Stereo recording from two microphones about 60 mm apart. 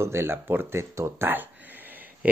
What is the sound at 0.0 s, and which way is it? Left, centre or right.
Speech, right.